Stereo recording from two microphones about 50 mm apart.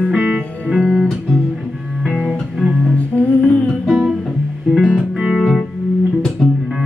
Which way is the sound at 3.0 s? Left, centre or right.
Left.